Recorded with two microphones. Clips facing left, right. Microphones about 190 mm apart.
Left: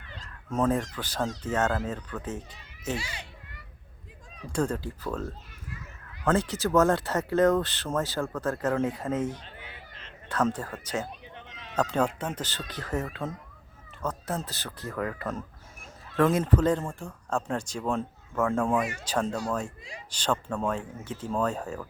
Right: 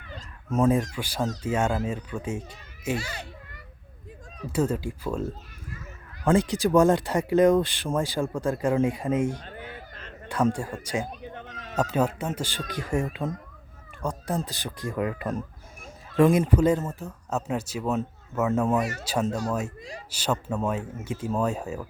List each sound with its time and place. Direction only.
0.5 s speech: 10° right (ahead or behind)
3.0 s children playing: 45° right (ahead or behind)
4.4 s speech: 5° right (ahead or behind)
6.2 s speech: 15° right (ahead or behind)
9.5 s honk: 45° right (ahead or behind)
10.2 s speech: 10° right (ahead or behind)
11.2 s a sound: 45° right (ahead or behind)
11.8 s speech: 5° right (ahead or behind)